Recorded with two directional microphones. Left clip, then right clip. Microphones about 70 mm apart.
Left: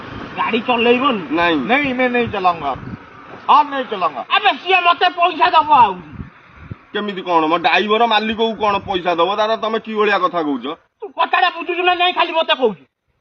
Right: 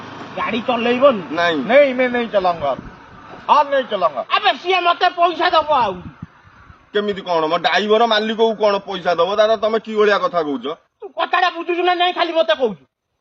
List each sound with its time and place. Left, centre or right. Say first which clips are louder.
0.0 s a man's voice: left 2 dB; right
11.3 s a man's voice: right 1 dB; right